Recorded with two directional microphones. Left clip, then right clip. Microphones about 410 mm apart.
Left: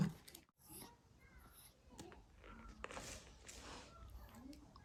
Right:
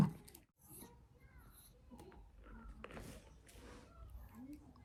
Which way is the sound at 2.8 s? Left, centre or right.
Centre.